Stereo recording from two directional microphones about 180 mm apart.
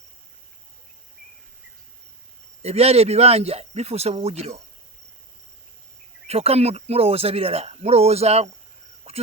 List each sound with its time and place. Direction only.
2.6 s speech: 35° right (ahead or behind)
6.2 s speech: 35° right (ahead or behind)
9.1 s a sound: 35° right (ahead or behind)